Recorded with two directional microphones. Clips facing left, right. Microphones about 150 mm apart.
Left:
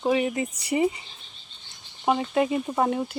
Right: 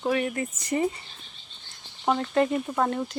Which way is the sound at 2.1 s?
5° left (ahead or behind).